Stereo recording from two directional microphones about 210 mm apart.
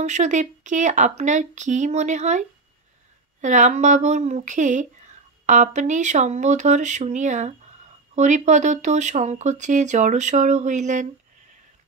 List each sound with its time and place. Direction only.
0.0 s speech: 35° right (ahead or behind)